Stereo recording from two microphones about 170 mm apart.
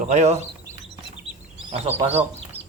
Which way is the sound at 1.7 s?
35° right (ahead or behind).